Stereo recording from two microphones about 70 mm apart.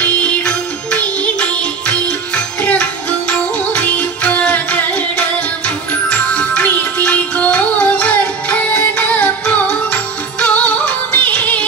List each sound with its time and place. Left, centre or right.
0.9 s music: centre